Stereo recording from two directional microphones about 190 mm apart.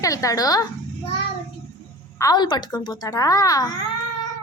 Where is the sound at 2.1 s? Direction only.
20° left (ahead or behind).